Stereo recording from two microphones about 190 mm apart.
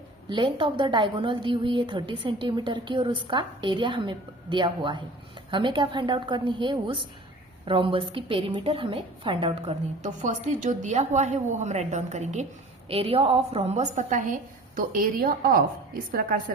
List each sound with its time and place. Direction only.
0.3 s a woman's voice: 25° right (ahead or behind); by 15.6 s 50° right (ahead or behind)